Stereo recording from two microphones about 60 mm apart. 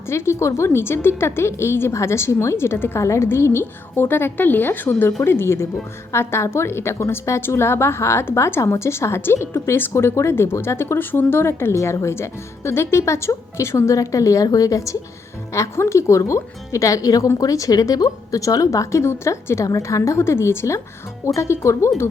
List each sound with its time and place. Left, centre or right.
0.1 s a woman's voice: left
3.0 s a woman's voice: left
5.2 s a woman's voice: left
15.5 s a woman's voice: left